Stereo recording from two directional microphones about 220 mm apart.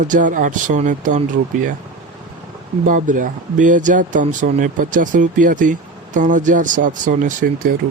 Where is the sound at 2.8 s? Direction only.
35° right (ahead or behind).